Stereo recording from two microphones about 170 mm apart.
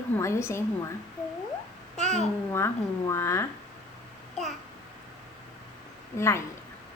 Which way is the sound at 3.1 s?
15° left (ahead or behind).